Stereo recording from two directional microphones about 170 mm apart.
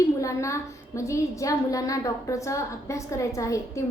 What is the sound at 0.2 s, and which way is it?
A woman's voice, 20° left (ahead or behind).